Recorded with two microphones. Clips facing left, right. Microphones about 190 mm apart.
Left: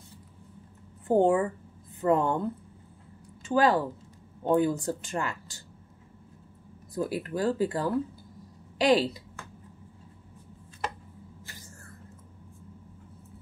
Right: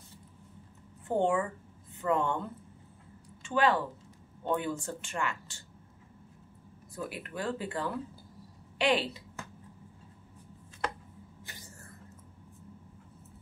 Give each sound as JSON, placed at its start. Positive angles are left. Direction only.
{"t": 1.0, "sound": "speech", "side_deg": 35}
{"t": 3.4, "sound": "speech", "side_deg": 35}
{"t": 6.9, "sound": "speech", "side_deg": 35}